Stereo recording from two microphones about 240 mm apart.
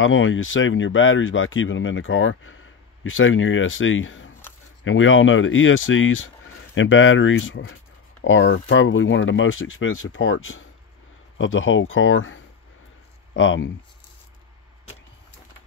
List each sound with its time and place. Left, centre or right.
0.0 s speech: left